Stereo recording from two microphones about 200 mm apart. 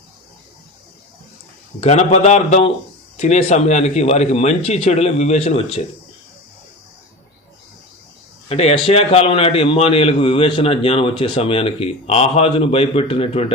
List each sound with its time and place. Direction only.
1.8 s speech: 35° left (ahead or behind)
8.4 s a man's voice: 30° left (ahead or behind)